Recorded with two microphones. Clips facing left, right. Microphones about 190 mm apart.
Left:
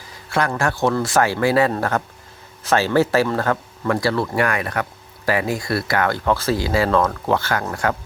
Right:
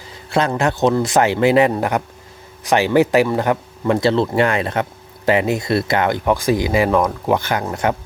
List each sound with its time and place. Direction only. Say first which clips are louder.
0.3 s a man's voice: right 3 dB; 20° right (ahead or behind)